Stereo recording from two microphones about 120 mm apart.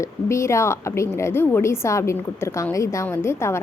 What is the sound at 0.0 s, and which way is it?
A woman's voice, 25° left (ahead or behind).